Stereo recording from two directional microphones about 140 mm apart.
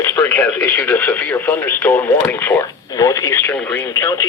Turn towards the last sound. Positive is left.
turn(degrees=20)  # may be behind; listen again after turning